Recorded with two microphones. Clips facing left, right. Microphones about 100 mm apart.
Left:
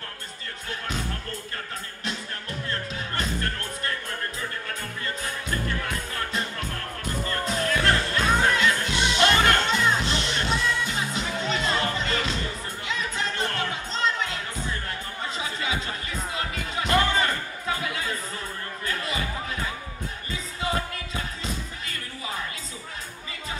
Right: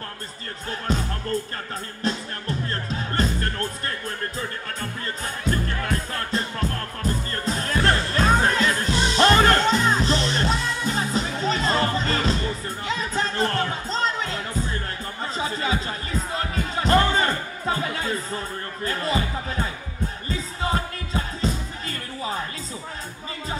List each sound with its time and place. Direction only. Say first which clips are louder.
0.7 s speech: right 6 dB; 35° right (ahead or behind)
2.0 s music: right 7 dB; 35° right (ahead or behind)
5.2 s music: right 6 dB; 35° right (ahead or behind)